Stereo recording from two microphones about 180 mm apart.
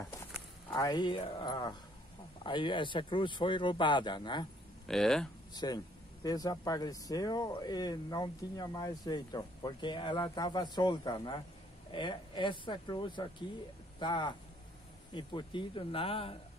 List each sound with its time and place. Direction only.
0.7 s speech: 25° left (ahead or behind)
4.8 s speech: 5° left (ahead or behind)
5.5 s speech: 20° left (ahead or behind)